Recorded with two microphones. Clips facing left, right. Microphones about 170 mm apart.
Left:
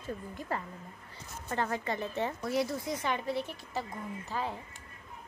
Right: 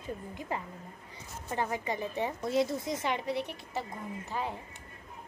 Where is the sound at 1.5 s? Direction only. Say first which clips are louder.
Even; 15° right (ahead or behind).